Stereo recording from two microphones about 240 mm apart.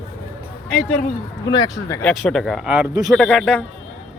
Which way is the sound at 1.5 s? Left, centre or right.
Centre.